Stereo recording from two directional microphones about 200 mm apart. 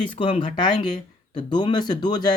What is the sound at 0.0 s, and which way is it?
Speech, 25° left (ahead or behind).